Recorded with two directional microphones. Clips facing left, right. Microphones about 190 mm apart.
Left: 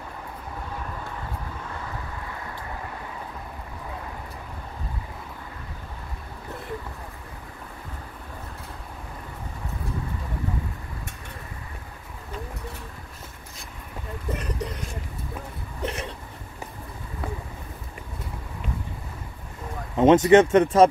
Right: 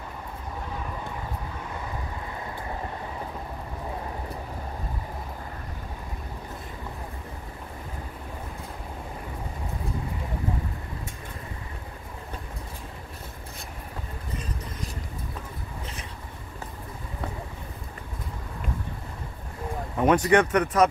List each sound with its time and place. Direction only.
15.8 s hiccup: 70° left (ahead or behind)
20.0 s speech: 25° left (ahead or behind)